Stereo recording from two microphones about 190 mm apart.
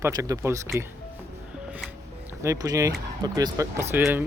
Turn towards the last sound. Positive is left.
turn(degrees=-10)  # may be behind; listen again after turning